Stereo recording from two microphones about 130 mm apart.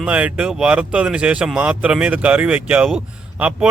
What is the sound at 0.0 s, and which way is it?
Speech, 10° right (ahead or behind).